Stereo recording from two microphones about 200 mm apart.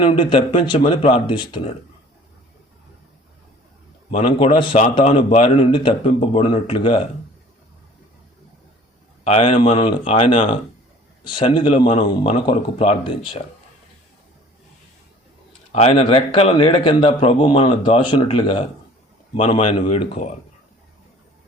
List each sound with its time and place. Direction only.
0.0 s a man's voice: 25° left (ahead or behind)
4.2 s a man's voice: 30° left (ahead or behind)
9.2 s a man's voice: 30° left (ahead or behind)
15.7 s a man's voice: 30° left (ahead or behind)